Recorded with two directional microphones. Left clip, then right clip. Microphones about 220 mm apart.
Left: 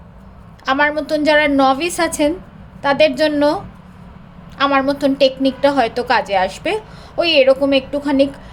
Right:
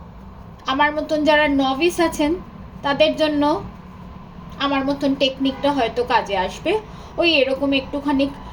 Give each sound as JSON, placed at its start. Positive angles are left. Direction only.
{"t": 0.6, "sound": "a woman's voice", "side_deg": 35}
{"t": 4.5, "sound": "a woman's voice", "side_deg": 40}